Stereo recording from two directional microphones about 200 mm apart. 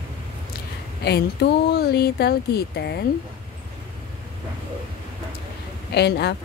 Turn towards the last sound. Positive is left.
turn(degrees=55)  # may be behind; listen again after turning